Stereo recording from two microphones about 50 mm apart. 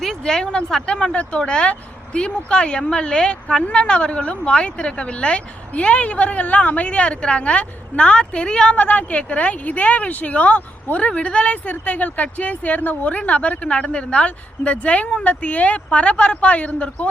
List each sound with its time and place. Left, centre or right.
0.0 s speech: centre; by 17.1 s left